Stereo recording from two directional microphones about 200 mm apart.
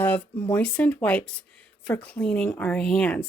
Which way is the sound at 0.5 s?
10° left (ahead or behind).